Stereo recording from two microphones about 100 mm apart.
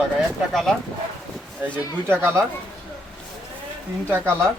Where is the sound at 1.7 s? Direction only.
20° right (ahead or behind).